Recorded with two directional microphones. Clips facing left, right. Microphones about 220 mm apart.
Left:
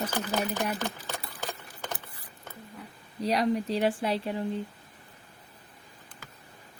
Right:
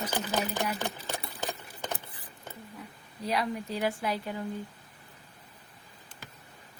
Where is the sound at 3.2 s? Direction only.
35° left (ahead or behind).